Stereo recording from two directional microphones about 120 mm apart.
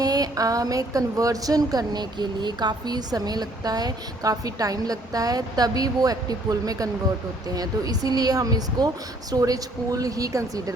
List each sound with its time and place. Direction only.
0.0 s speech: 30° right (ahead or behind)